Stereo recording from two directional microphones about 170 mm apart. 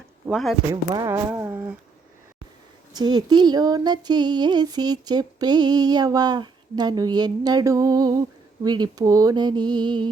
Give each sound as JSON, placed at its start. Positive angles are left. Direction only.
{"t": 0.3, "sound": "speech", "side_deg": 0}
{"t": 0.7, "sound": "speech", "side_deg": -20}
{"t": 2.9, "sound": "a sound", "side_deg": -25}